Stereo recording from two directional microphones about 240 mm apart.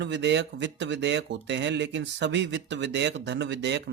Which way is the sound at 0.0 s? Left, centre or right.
Right.